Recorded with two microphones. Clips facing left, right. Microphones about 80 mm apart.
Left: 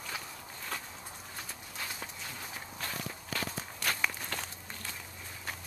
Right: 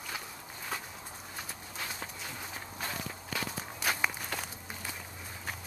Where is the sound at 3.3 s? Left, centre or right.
Centre.